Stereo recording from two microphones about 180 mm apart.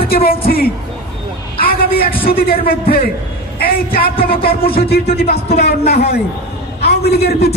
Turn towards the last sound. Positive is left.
turn(degrees=60)  # may be behind; listen again after turning